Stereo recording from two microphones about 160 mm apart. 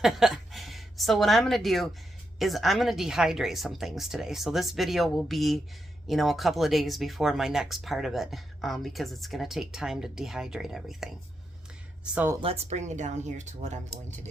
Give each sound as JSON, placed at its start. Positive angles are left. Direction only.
{"t": 0.0, "sound": "speech", "side_deg": 0}
{"t": 12.1, "sound": "speech", "side_deg": -10}
{"t": 12.4, "sound": "speech", "side_deg": -40}